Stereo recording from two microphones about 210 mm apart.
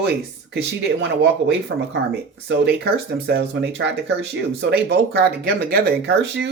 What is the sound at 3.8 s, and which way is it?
Speech, 60° right (ahead or behind).